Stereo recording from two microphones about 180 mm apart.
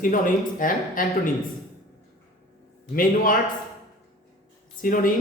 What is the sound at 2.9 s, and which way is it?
Speech, 50° left (ahead or behind).